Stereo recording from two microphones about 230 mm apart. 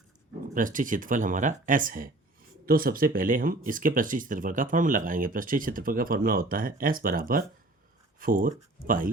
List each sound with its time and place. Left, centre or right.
0.5 s speech: right